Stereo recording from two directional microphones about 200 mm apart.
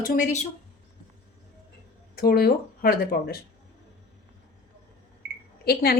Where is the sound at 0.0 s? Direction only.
45° left (ahead or behind).